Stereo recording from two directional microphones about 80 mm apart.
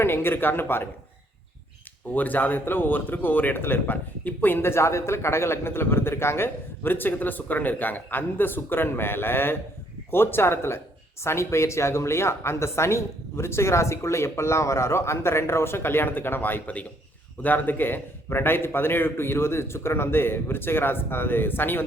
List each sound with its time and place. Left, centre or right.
0.0 s a man's voice: left
2.1 s a man's voice: left